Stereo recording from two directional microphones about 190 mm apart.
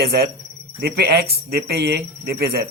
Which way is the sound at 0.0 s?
55° right (ahead or behind).